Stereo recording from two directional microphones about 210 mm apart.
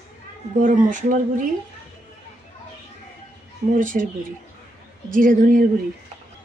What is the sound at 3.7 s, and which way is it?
Speech, 40° right (ahead or behind).